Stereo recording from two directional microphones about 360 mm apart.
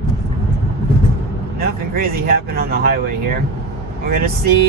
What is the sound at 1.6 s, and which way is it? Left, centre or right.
Speech, right.